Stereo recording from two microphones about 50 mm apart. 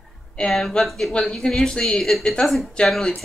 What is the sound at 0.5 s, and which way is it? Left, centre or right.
A woman's voice, centre.